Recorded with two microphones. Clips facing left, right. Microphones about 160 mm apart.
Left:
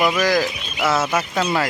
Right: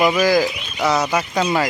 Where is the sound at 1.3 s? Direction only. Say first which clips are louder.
Right 2 dB; 5° right (ahead or behind).